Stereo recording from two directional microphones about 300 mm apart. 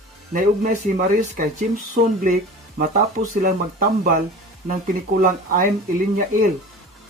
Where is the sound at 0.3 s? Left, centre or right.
Right.